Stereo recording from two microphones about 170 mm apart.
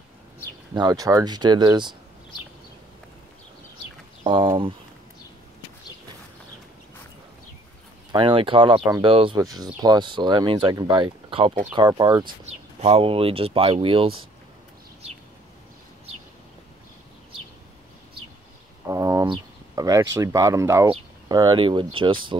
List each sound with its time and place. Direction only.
0.7 s speech: 20° right (ahead or behind)
4.2 s speech: 30° right (ahead or behind)
8.1 s speech: 30° right (ahead or behind)
12.4 s speech: 35° right (ahead or behind)
18.9 s speech: 15° right (ahead or behind)
19.2 s a sound: 25° right (ahead or behind)
20.2 s speech: 20° right (ahead or behind)